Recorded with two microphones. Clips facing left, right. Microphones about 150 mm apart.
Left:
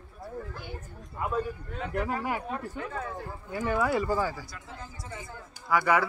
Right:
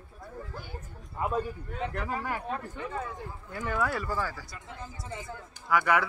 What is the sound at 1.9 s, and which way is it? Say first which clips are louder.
Speech: left 6 dB; 10° left (ahead or behind).